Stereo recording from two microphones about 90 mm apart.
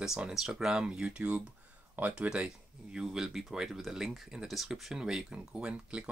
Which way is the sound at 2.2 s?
10° right (ahead or behind).